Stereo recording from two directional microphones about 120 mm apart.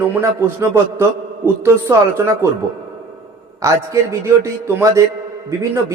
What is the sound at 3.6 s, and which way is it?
A man's voice, 25° right (ahead or behind).